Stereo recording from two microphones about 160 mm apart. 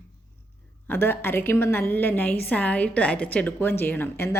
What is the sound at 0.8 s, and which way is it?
Speech, 10° left (ahead or behind).